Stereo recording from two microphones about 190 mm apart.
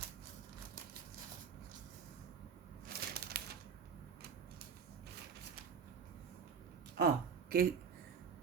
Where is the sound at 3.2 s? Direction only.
55° right (ahead or behind).